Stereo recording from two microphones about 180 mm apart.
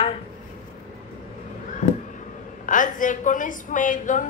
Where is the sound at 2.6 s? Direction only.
45° left (ahead or behind).